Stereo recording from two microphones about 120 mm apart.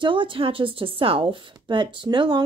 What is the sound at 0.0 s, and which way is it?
Speech, 45° right (ahead or behind).